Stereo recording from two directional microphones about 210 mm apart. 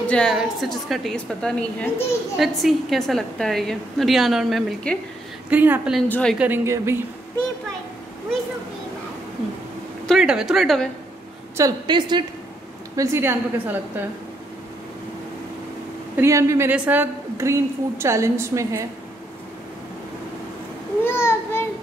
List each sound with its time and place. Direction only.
0.0 s a woman's voice: 5° left (ahead or behind)
6.0 s a woman's voice: 10° left (ahead or behind)
6.3 s a woman's voice: 10° right (ahead or behind)
10.0 s a woman's voice: centre (ahead or behind)
11.5 s a woman's voice: 20° right (ahead or behind)
16.2 s a woman's voice: 15° right (ahead or behind)
21.0 s a child's voice: 10° left (ahead or behind)